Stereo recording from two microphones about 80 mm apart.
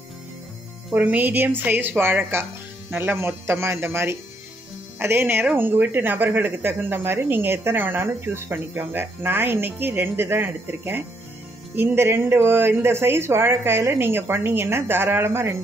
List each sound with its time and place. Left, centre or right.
0.9 s speech: centre